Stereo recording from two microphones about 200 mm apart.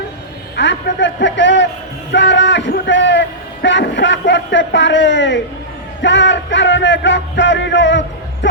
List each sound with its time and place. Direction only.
0.5 s a man's voice: 60° left (ahead or behind)